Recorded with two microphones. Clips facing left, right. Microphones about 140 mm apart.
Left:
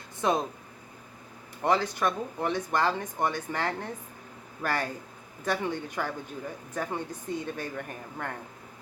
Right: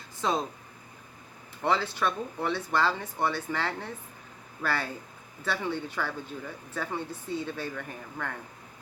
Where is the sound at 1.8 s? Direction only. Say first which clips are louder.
Left 1 dB; 15° left (ahead or behind).